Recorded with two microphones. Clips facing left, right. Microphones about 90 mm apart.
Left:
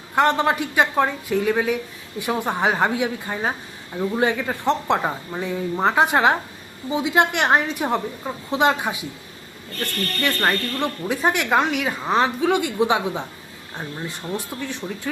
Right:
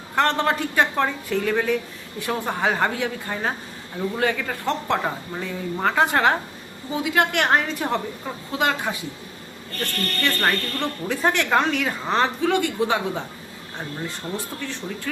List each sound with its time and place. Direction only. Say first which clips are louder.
0.2 s speech: left 2 dB; 15° left (ahead or behind)
14.3 s speech: left 2 dB; 15° left (ahead or behind)